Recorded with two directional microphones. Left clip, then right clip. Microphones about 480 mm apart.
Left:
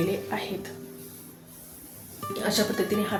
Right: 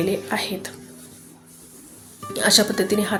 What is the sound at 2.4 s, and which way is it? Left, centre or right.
Speech, centre.